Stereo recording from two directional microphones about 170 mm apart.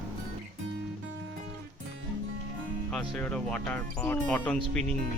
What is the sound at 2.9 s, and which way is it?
Speech, 5° left (ahead or behind).